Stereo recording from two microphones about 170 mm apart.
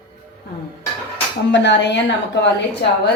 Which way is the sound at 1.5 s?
90° left.